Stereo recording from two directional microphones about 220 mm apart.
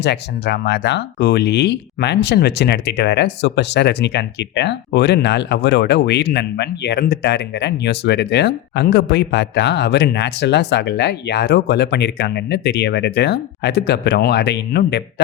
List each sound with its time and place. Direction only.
0.0 s speech: 50° left (ahead or behind)